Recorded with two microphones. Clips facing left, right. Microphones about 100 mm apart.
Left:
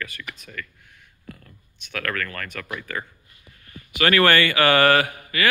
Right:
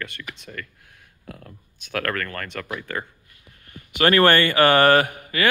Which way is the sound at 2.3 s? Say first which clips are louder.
Right 2 dB; 25° right (ahead or behind).